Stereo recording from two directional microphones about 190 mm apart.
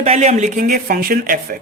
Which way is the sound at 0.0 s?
35° right (ahead or behind).